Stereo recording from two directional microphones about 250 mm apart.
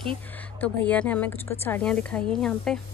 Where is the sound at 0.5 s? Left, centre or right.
Centre.